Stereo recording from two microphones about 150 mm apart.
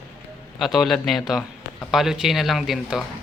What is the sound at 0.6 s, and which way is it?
Speech, centre (ahead or behind).